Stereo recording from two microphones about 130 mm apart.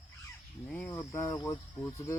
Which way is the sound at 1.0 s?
25° left (ahead or behind).